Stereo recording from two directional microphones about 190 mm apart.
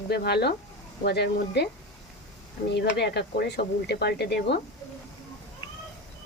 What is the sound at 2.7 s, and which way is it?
Speech, 60° left (ahead or behind).